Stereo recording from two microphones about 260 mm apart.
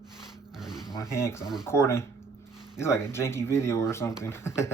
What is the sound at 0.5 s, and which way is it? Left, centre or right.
Zipper, centre.